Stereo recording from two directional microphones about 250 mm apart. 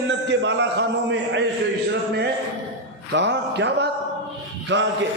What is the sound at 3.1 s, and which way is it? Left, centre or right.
Speech, right.